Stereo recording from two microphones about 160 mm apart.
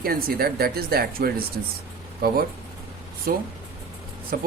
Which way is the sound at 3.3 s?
65° right (ahead or behind).